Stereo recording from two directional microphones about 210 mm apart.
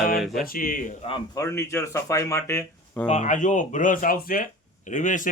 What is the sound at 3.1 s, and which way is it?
Speech, 35° left (ahead or behind).